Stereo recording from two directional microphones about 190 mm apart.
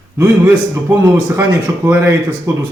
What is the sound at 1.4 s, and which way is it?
Speech, 10° right (ahead or behind).